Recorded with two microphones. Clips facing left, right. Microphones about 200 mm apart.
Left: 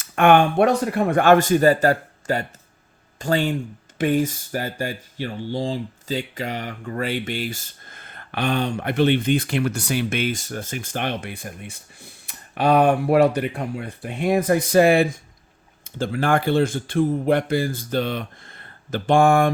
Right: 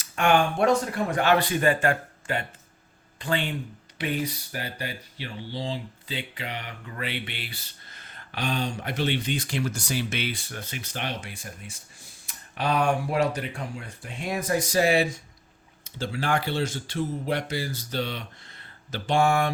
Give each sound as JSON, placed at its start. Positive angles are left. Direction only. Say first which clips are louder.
{"t": 0.0, "sound": "speech", "louder": "left 6 dB", "side_deg": 55}